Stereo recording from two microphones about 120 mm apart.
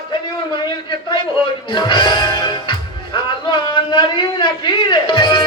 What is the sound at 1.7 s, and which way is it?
Music, 40° left (ahead or behind).